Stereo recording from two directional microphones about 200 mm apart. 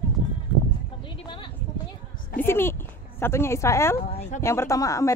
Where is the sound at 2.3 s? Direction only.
10° left (ahead or behind).